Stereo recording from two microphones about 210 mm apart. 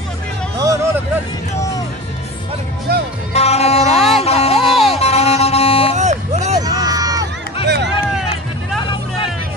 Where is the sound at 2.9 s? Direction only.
50° right (ahead or behind).